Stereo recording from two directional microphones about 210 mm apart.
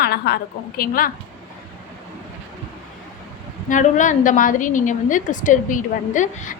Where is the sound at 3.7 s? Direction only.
35° left (ahead or behind).